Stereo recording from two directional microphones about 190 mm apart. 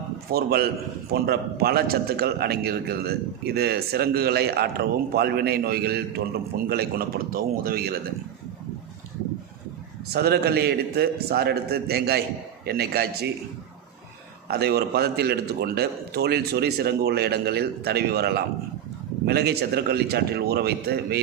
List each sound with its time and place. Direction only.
0.3 s a man's voice: 55° right (ahead or behind)
10.1 s a man's voice: 55° right (ahead or behind)
14.4 s a man's voice: 55° right (ahead or behind)